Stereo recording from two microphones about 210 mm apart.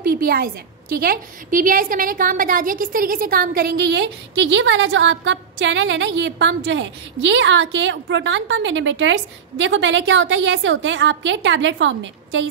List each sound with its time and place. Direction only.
0.0 s a woman's voice: 45° right (ahead or behind); by 12.4 s 65° right (ahead or behind)